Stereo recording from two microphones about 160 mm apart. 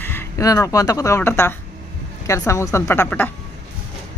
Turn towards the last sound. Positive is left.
turn(degrees=10)  # may be behind; listen again after turning